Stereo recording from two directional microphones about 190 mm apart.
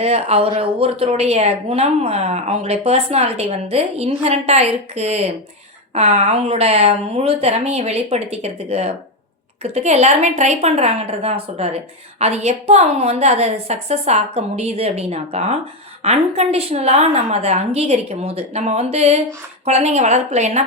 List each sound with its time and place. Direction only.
0.0 s a woman's voice: 30° right (ahead or behind)